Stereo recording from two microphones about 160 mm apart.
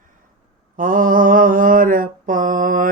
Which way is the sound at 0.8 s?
60° right (ahead or behind).